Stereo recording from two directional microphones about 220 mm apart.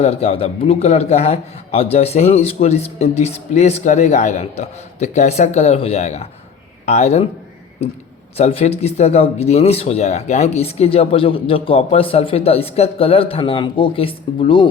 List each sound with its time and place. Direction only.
0.0 s a man's voice: 25° left (ahead or behind)
8.4 s speech: 25° left (ahead or behind)